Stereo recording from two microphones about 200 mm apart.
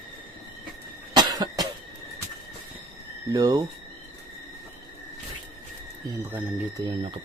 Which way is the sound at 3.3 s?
20° right (ahead or behind).